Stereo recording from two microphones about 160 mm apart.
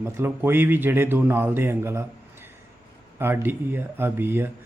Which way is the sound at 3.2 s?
15° right (ahead or behind).